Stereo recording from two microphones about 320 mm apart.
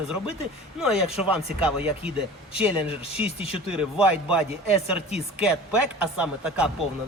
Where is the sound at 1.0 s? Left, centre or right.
Centre.